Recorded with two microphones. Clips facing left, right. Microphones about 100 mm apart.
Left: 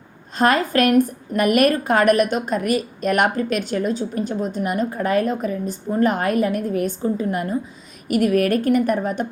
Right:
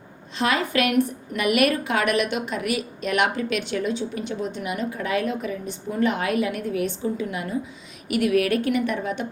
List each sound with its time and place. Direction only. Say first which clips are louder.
0.3 s a woman's voice: left 5 dB; 45° left (ahead or behind)